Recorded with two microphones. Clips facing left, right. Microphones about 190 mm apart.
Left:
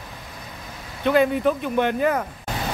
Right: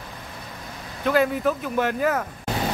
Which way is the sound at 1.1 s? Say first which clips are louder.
Left 2 dB; centre (ahead or behind).